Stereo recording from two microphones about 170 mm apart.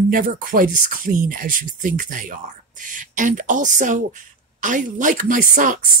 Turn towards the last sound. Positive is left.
turn(degrees=-50)  # may be behind; listen again after turning